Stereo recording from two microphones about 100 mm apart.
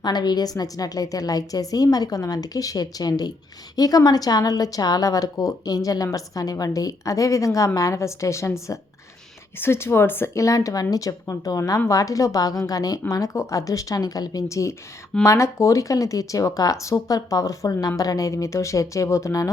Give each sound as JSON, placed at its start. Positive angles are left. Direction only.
{"t": 0.0, "sound": "a woman's voice", "side_deg": 45}